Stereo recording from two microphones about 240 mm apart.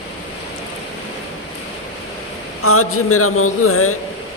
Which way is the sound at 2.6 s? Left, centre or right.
Left.